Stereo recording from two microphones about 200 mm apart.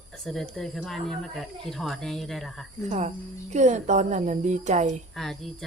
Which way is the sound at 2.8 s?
35° right (ahead or behind).